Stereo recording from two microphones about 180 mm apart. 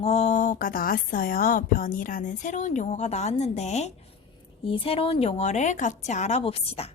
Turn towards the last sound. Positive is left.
turn(degrees=35)  # may be behind; listen again after turning